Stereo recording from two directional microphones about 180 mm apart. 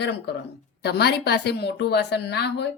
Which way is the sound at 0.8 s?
65° left (ahead or behind).